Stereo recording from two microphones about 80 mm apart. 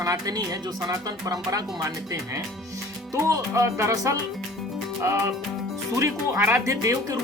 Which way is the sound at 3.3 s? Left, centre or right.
Right.